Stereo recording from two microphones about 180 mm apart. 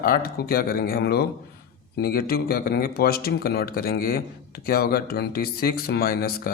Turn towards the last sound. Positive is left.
turn(degrees=55)  # may be behind; listen again after turning